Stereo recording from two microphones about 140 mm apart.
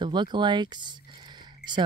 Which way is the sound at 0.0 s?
35° right (ahead or behind).